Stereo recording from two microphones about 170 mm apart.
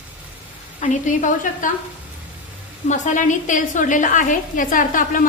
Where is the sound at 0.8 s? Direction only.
50° left (ahead or behind).